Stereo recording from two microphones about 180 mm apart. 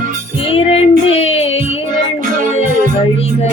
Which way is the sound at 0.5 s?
35° left (ahead or behind).